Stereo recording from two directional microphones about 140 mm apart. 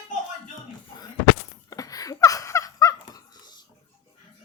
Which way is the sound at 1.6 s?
25° left (ahead or behind).